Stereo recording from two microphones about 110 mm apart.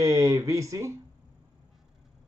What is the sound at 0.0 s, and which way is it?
Speech, 30° right (ahead or behind).